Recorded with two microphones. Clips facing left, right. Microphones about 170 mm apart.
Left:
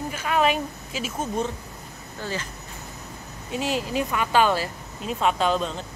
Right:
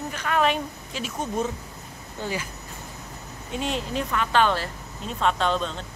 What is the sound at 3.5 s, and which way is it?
Speech, 5° left (ahead or behind).